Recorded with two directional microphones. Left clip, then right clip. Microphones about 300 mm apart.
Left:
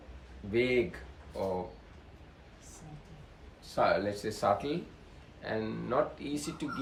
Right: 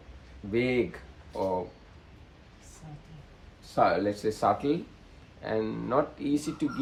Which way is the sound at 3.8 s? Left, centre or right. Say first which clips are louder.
Right 4 dB; centre.